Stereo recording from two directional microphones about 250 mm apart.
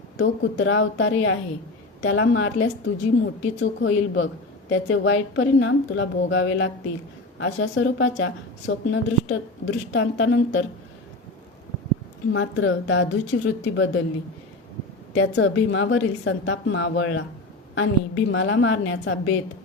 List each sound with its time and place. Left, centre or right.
0.2 s speech: left
12.3 s speech: left
15.1 s speech: left